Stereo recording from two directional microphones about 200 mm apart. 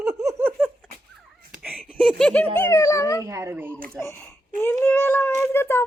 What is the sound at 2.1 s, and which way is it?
Speech, 5° left (ahead or behind).